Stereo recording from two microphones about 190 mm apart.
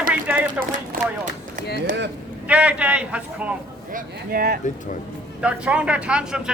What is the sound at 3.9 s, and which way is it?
Speech, 50° right (ahead or behind).